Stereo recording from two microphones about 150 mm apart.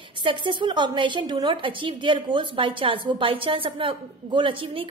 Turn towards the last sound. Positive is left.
turn(degrees=-35)  # may be behind; listen again after turning